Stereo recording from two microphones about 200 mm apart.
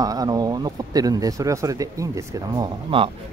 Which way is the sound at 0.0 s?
20° right (ahead or behind).